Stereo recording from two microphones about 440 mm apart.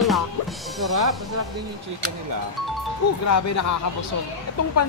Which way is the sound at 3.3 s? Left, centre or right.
Left.